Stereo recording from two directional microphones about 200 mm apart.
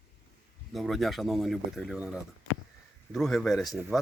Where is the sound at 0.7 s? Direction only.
Centre (ahead or behind).